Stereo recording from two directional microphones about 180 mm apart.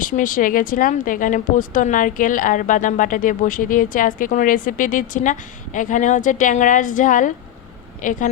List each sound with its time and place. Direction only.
0.0 s speech: 50° left (ahead or behind)